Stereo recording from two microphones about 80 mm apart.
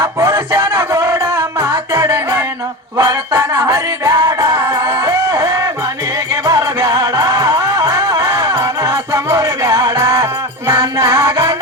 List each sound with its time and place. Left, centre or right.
0.0 s music: right